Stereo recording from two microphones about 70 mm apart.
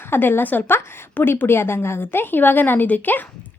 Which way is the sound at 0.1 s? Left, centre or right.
Left.